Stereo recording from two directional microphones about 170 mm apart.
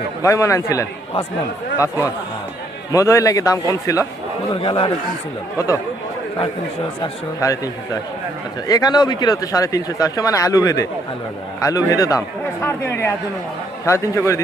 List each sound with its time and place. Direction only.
0.2 s a man's voice: 20° left (ahead or behind)
4.6 s speech: 30° left (ahead or behind)
5.5 s speech: 20° left (ahead or behind)
7.0 s a man's voice: 20° left (ahead or behind)